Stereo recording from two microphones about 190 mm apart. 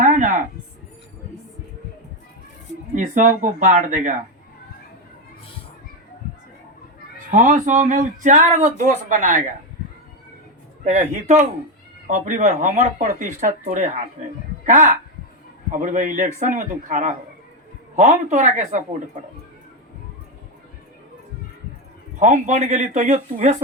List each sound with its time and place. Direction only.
0.0 s a sound: 40° right (ahead or behind)
2.9 s speech: 40° right (ahead or behind)
7.3 s speech: 40° right (ahead or behind)
10.8 s speech: 40° right (ahead or behind)
22.2 s speech: 40° right (ahead or behind)